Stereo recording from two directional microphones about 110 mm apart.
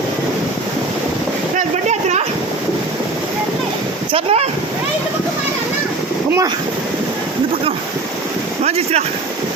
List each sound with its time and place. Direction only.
1.9 s a sound: 90° right
4.1 s speech: 65° right (ahead or behind)
8.6 s boat: 75° right (ahead or behind)